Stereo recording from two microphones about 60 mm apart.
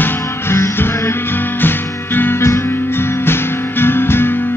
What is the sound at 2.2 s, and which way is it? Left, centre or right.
Music, left.